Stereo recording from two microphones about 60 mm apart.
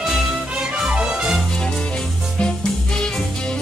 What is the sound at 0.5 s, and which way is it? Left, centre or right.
Music, centre.